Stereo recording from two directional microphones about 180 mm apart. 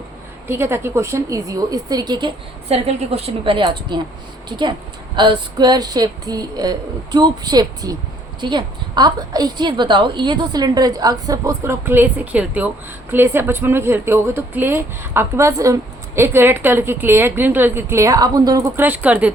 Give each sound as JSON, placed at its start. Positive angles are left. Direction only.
{"t": 0.4, "sound": "a woman's voice", "side_deg": -15}